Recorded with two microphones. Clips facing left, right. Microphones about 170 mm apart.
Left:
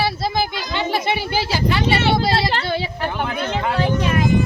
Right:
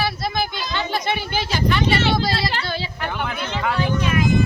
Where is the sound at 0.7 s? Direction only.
25° left (ahead or behind).